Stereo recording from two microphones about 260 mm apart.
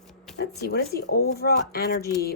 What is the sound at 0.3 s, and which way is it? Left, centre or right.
Speech, left.